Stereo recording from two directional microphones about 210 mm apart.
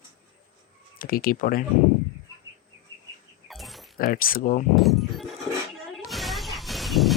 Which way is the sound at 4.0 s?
45° left (ahead or behind).